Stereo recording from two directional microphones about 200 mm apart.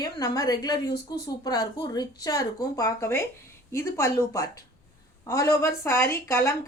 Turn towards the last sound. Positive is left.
turn(degrees=10)  # may be behind; listen again after turning